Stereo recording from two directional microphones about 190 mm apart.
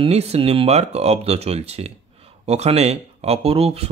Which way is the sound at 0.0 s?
35° right (ahead or behind).